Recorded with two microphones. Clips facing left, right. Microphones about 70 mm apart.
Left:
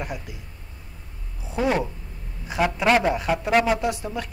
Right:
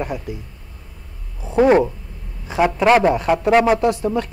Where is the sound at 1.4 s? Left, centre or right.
Right.